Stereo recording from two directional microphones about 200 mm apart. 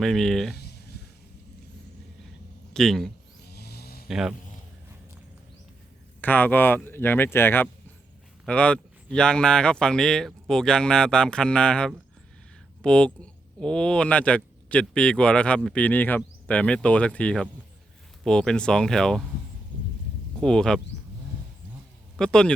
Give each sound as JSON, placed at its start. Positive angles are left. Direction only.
{"t": 0.0, "sound": "speech", "side_deg": 0}
{"t": 0.5, "sound": "a sound", "side_deg": 55}
{"t": 2.7, "sound": "speech", "side_deg": 0}
{"t": 3.4, "sound": "snoring", "side_deg": 55}
{"t": 4.1, "sound": "speech", "side_deg": 0}
{"t": 6.2, "sound": "speech", "side_deg": 10}
{"t": 20.4, "sound": "speech", "side_deg": 5}
{"t": 22.2, "sound": "speech", "side_deg": 5}